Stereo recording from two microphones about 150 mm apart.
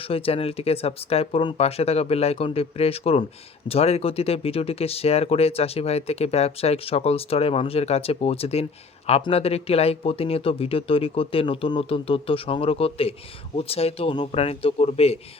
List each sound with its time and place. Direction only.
0.1 s speech: 40° left (ahead or behind)